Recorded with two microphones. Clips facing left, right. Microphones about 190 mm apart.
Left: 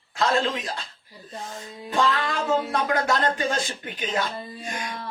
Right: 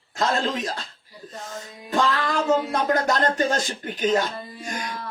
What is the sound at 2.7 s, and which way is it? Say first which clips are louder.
A man's voice: right 2 dB; 40° right (ahead or behind).